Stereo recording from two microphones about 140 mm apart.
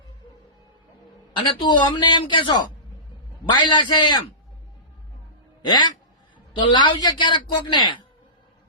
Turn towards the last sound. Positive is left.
turn(degrees=35)  # may be behind; listen again after turning